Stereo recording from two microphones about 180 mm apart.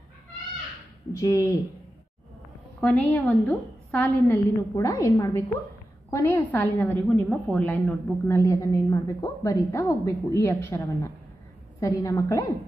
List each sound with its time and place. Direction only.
1.1 s a woman's voice: 20° left (ahead or behind)
2.8 s a woman's voice: 10° left (ahead or behind)